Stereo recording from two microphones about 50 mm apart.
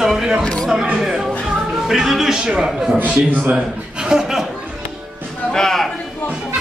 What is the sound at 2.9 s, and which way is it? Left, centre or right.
Speech, right.